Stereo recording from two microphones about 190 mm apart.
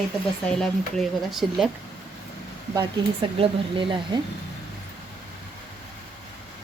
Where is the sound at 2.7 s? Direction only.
25° right (ahead or behind).